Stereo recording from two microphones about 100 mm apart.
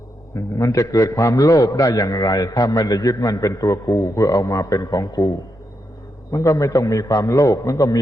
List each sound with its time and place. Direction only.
0.3 s a man's voice: 35° left (ahead or behind)
6.3 s a man's voice: 35° left (ahead or behind)